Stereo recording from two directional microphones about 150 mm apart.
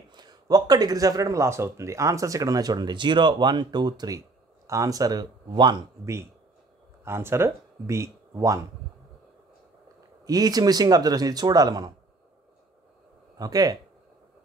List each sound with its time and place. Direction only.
0.1 s speech: 30° right (ahead or behind)
7.1 s speech: 15° right (ahead or behind)
10.2 s speech: 25° right (ahead or behind)
13.4 s speech: 25° right (ahead or behind)